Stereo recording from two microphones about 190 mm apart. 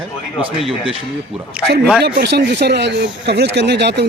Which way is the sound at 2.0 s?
60° right (ahead or behind).